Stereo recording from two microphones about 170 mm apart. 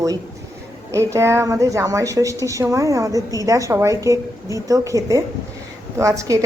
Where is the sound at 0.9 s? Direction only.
15° right (ahead or behind).